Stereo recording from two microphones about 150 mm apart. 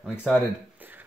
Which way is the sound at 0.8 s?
10° right (ahead or behind).